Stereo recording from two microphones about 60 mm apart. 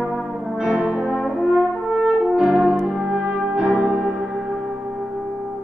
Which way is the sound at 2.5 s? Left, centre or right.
Centre.